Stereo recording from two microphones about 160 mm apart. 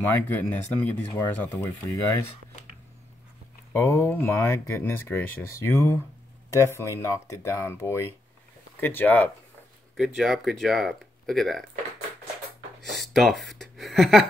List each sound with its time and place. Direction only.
0.0 s speech: 10° left (ahead or behind)
3.7 s speech: 15° left (ahead or behind)
9.9 s speech: centre (ahead or behind)
12.8 s a sound: centre (ahead or behind)